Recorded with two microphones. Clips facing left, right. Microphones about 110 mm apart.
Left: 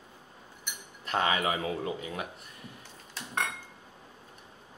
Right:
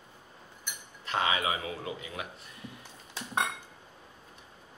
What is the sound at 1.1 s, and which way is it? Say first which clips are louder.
Speech: left 2 dB; 40° left (ahead or behind).